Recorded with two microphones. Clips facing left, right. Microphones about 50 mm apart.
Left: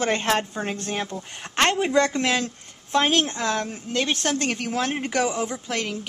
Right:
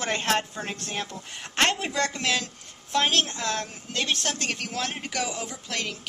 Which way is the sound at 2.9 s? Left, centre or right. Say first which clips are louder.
Left 3 dB; centre.